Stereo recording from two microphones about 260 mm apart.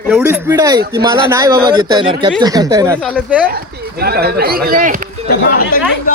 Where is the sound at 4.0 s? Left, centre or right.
Right.